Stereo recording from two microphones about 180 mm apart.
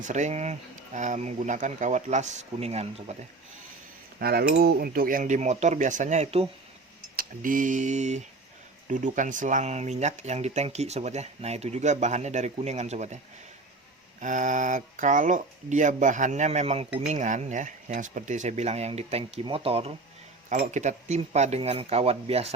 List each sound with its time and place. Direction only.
0.0 s speech: 40° right (ahead or behind)
4.2 s speech: 60° right (ahead or behind); by 6.5 s 35° right (ahead or behind)
7.2 s speech: 50° right (ahead or behind)
14.2 s speech: 45° right (ahead or behind)